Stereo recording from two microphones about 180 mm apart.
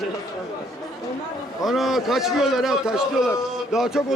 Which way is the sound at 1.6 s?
Centre (ahead or behind).